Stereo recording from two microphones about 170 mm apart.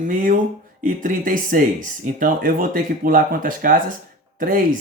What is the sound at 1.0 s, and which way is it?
Speech, 50° right (ahead or behind).